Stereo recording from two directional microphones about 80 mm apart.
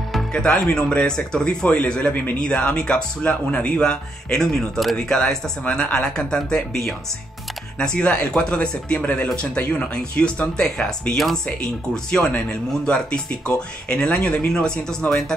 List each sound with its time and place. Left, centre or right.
0.3 s a man's voice: centre